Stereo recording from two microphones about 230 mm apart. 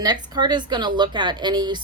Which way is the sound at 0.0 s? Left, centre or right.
Centre.